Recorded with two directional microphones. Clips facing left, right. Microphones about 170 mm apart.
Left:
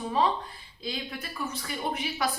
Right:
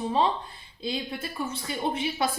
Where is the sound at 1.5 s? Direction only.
25° right (ahead or behind).